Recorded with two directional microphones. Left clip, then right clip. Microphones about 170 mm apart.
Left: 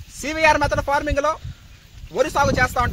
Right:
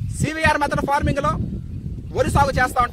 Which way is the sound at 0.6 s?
10° right (ahead or behind).